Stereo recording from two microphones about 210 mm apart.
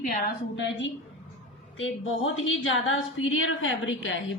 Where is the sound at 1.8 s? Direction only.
70° left (ahead or behind).